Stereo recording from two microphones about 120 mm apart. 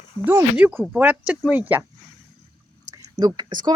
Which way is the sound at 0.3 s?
15° right (ahead or behind).